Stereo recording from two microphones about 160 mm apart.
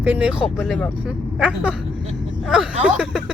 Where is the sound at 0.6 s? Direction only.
5° left (ahead or behind).